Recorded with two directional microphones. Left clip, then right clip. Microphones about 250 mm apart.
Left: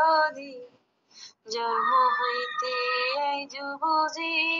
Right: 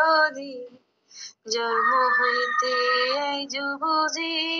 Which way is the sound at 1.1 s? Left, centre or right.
Right.